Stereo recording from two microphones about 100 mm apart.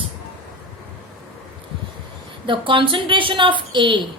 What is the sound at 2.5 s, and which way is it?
A woman's voice, 55° right (ahead or behind).